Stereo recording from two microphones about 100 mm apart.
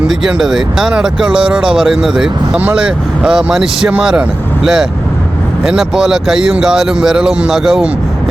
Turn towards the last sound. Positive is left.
turn(degrees=-5)  # may be behind; listen again after turning